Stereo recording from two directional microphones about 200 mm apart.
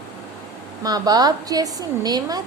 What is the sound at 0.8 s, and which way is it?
A woman's voice, 20° right (ahead or behind).